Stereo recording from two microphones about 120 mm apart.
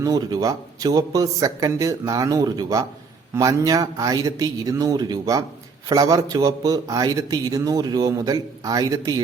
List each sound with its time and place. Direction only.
0.0 s a man's voice: 30° right (ahead or behind)